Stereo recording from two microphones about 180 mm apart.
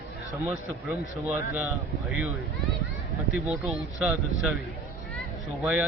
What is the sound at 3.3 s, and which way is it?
Speech, 5° right (ahead or behind).